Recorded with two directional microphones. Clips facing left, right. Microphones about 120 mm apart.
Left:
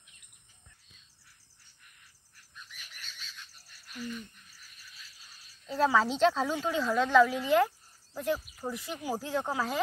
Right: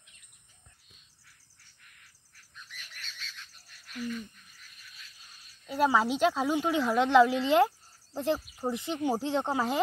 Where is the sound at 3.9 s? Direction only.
10° left (ahead or behind).